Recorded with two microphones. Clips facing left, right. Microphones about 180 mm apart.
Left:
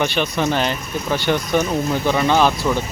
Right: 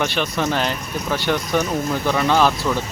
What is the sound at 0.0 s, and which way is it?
Speech, centre (ahead or behind).